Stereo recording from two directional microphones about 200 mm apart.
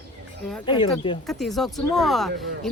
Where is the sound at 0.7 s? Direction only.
25° left (ahead or behind).